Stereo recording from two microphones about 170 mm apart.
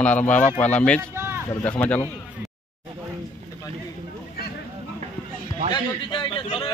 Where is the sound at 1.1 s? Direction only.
15° right (ahead or behind).